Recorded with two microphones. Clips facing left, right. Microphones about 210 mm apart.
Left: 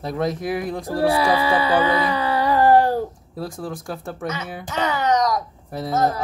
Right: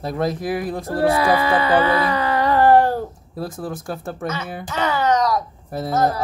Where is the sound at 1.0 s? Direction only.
10° left (ahead or behind).